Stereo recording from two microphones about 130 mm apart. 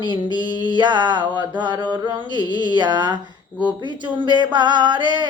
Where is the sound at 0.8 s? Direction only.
35° right (ahead or behind).